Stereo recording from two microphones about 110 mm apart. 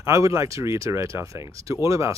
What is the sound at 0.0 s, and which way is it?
Speech, 30° right (ahead or behind).